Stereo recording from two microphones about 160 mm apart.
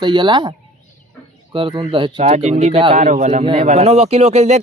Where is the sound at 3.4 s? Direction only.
35° right (ahead or behind).